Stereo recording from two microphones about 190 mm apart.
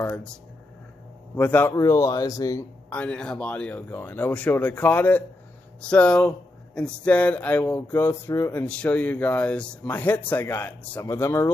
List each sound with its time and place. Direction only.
0.0 s speech: 10° left (ahead or behind)
1.3 s speech: 10° left (ahead or behind)
2.9 s speech: 5° left (ahead or behind)